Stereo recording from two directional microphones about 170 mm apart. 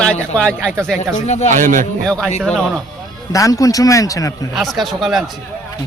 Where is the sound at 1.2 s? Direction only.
40° left (ahead or behind).